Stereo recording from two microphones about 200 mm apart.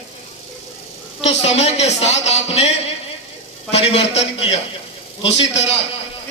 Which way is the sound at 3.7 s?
30° left (ahead or behind).